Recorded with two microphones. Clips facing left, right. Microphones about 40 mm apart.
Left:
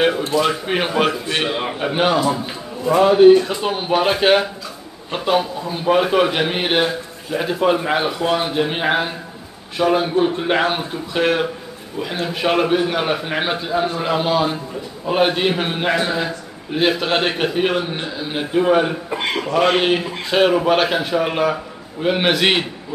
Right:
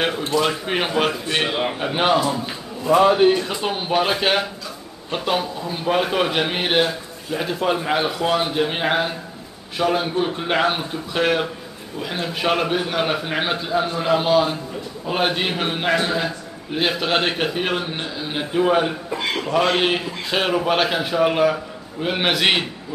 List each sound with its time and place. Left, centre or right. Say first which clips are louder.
0.3 s a man's voice: left 2 dB; centre
19.0 s a man's voice: left 2 dB; left
19.8 s a man's voice: left 2 dB; centre